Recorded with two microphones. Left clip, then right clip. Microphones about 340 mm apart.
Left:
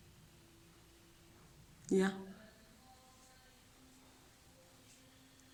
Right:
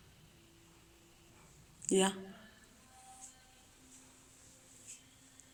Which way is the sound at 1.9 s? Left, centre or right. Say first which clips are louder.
Right 3 dB; centre.